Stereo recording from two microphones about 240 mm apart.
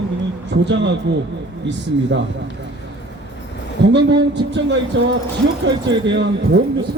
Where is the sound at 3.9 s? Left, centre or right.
Right.